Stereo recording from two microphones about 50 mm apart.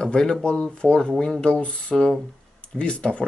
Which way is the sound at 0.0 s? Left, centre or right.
Centre.